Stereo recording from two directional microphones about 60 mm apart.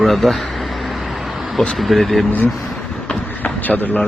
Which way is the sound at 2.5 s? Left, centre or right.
Centre.